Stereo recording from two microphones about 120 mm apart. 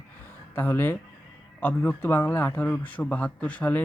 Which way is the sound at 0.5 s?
15° left (ahead or behind).